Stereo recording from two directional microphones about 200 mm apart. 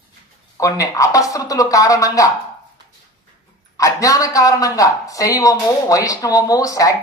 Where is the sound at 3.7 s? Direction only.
15° left (ahead or behind).